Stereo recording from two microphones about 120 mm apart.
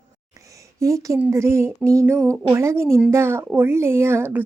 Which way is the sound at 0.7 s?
25° right (ahead or behind).